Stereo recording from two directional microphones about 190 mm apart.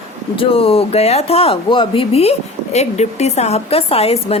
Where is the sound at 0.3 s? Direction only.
30° left (ahead or behind).